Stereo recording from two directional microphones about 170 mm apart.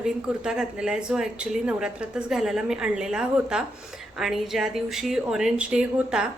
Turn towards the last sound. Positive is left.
turn(degrees=-5)  # may be behind; listen again after turning